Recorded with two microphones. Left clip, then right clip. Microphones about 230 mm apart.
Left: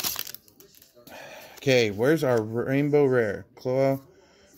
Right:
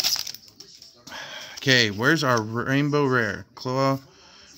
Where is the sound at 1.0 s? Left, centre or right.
Centre.